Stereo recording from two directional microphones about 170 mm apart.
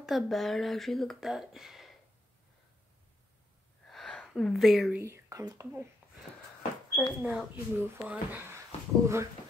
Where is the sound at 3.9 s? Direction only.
5° left (ahead or behind).